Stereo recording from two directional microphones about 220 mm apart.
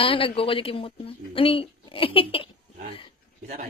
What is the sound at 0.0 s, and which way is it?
A woman's voice, 25° left (ahead or behind).